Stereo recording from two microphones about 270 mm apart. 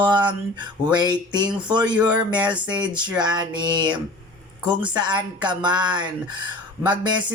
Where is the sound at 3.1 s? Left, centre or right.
Centre.